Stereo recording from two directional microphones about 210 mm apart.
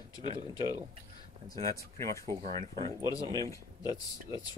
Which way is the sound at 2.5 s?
25° right (ahead or behind).